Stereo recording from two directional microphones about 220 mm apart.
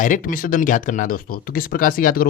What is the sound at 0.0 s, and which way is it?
Speech, 35° left (ahead or behind).